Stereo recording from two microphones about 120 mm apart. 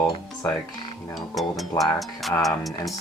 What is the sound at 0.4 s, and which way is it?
Speech, 25° left (ahead or behind).